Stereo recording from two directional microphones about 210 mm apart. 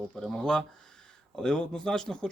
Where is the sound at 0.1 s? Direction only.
Centre (ahead or behind).